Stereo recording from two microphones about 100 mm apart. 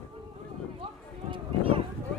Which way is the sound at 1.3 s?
70° right (ahead or behind).